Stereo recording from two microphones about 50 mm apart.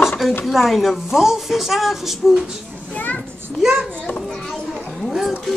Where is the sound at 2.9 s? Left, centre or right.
Left.